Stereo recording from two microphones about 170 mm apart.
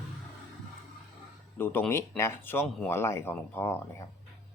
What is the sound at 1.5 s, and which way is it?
Speech, 10° left (ahead or behind).